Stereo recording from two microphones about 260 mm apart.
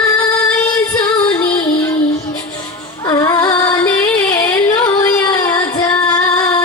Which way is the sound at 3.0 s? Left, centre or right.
Centre.